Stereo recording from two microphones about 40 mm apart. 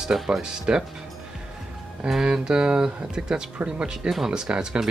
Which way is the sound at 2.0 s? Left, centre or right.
Centre.